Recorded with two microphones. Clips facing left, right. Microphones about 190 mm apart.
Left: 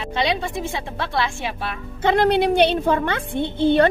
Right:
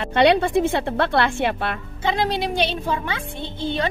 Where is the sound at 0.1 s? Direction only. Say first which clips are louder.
Right 7 dB; 65° right (ahead or behind).